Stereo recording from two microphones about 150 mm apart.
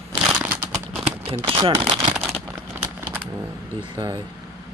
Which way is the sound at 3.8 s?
25° right (ahead or behind).